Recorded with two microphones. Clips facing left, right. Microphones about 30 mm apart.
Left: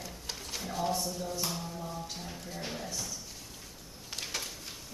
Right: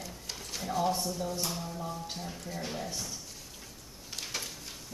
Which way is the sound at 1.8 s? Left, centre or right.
Centre.